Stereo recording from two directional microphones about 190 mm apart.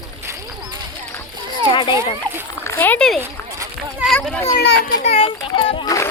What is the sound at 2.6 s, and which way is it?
Speech, 10° left (ahead or behind).